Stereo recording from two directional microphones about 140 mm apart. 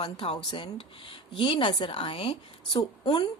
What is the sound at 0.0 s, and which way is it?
A woman's voice, 40° left (ahead or behind).